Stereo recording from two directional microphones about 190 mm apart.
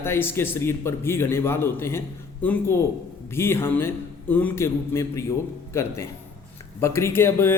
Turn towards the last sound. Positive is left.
turn(degrees=10)  # may be behind; listen again after turning